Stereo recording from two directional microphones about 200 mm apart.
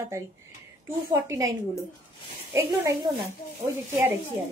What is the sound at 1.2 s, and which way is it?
Speech, 15° right (ahead or behind).